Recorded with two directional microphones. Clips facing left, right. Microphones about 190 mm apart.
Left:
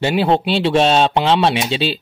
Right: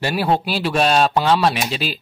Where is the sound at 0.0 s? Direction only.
25° left (ahead or behind).